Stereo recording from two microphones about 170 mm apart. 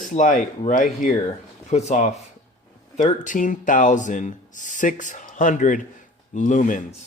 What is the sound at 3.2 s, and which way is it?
Speech, 50° left (ahead or behind).